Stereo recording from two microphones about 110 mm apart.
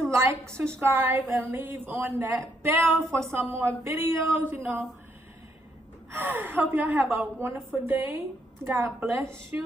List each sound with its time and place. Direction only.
0.7 s a woman's voice: 20° right (ahead or behind)
6.1 s a woman's voice: 20° right (ahead or behind)